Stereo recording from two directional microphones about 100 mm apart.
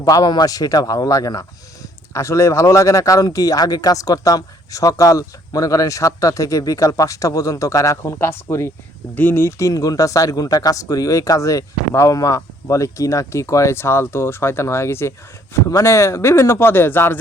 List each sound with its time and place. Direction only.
0.0 s speech: 40° left (ahead or behind); by 17.2 s 20° left (ahead or behind)